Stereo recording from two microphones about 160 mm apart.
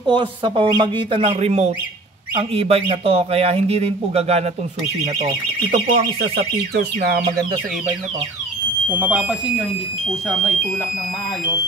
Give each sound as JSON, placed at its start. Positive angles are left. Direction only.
{"t": 0.0, "sound": "speech", "side_deg": -30}
{"t": 1.2, "sound": "speech", "side_deg": -40}
{"t": 5.9, "sound": "speech", "side_deg": -75}
{"t": 8.9, "sound": "speech", "side_deg": -10}